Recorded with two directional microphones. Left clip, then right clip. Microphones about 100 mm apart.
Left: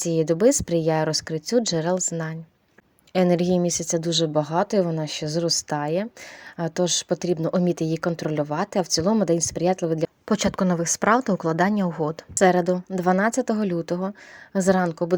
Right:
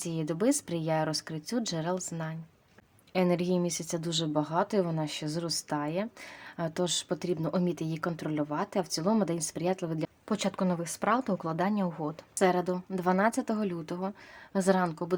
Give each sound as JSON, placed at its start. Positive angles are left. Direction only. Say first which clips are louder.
{"t": 0.0, "sound": "speech", "louder": "left 11 dB", "side_deg": 55}
{"t": 6.6, "sound": "speech", "louder": "left 7 dB", "side_deg": 45}
{"t": 10.2, "sound": "speech", "louder": "left 7 dB", "side_deg": 70}
{"t": 14.5, "sound": "speech", "louder": "left 6 dB", "side_deg": 45}